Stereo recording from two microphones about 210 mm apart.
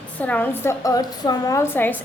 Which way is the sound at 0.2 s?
10° left (ahead or behind).